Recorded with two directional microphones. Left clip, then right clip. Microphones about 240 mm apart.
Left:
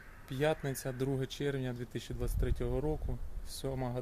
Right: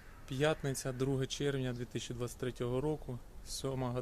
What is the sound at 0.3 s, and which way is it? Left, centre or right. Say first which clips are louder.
Speech: left 1 dB; centre.